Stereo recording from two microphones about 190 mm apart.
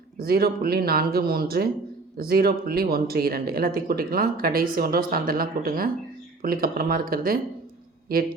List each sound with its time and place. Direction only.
0.2 s speech: 50° right (ahead or behind)